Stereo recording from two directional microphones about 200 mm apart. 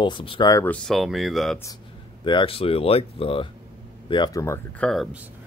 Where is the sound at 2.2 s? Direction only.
25° left (ahead or behind).